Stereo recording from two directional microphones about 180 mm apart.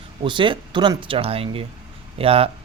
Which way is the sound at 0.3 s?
25° right (ahead or behind).